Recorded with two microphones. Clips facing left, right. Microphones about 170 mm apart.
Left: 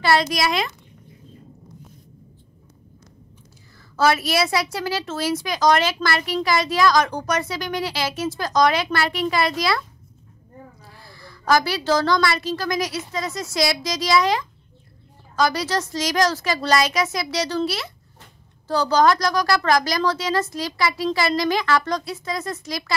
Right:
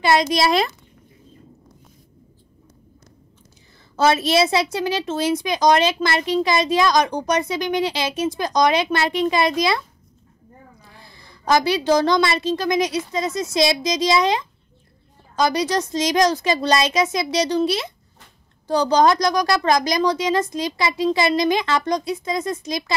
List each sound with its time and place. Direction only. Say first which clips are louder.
0.0 s a woman's voice: right 2 dB; 20° right (ahead or behind)
3.9 s a woman's voice: right 2 dB; 20° right (ahead or behind)